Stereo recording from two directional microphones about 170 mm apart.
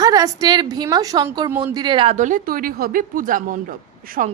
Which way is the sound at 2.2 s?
50° right (ahead or behind).